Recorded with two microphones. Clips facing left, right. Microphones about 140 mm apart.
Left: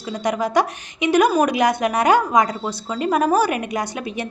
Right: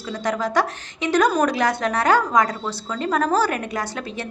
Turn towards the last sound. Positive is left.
turn(degrees=15)  # may be behind; listen again after turning